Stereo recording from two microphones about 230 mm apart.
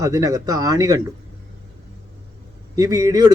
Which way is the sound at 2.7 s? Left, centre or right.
Centre.